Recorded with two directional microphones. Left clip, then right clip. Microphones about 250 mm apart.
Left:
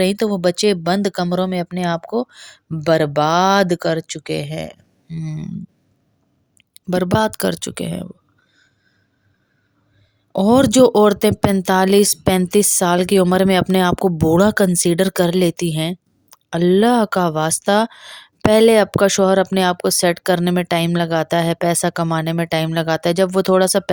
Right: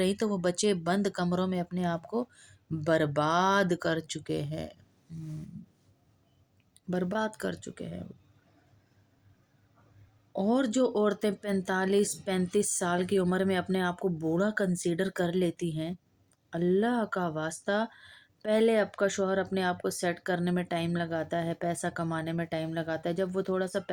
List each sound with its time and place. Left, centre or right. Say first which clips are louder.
0.0 s speech: left 12 dB; left
6.6 s speech: left 14 dB; left
10.3 s speech: left 15 dB; left